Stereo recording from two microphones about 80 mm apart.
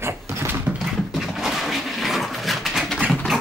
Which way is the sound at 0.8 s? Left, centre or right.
Centre.